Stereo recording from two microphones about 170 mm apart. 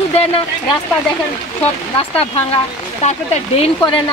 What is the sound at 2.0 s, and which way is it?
Speech, 35° left (ahead or behind).